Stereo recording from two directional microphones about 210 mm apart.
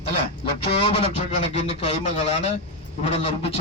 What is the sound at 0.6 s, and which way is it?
A man's voice, 25° left (ahead or behind).